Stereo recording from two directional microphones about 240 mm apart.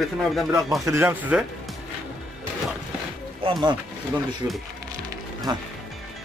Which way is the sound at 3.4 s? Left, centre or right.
Right.